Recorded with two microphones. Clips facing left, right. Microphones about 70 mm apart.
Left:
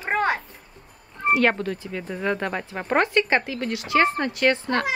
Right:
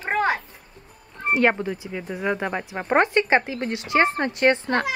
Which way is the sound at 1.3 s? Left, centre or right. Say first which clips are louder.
Right 2 dB; centre.